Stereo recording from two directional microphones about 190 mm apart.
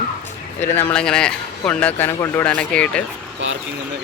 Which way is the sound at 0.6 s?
10° left (ahead or behind).